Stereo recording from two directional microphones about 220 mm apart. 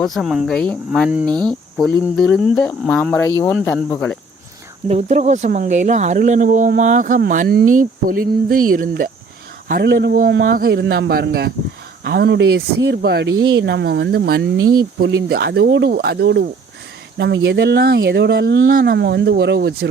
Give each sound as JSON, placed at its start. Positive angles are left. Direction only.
{"t": 0.0, "sound": "speech", "side_deg": 0}
{"t": 4.9, "sound": "speech", "side_deg": -30}